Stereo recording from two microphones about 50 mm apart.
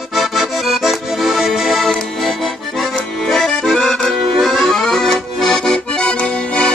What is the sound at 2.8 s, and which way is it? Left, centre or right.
Accordion, centre.